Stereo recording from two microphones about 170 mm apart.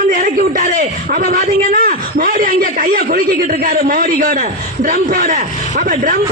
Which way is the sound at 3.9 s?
55° right (ahead or behind).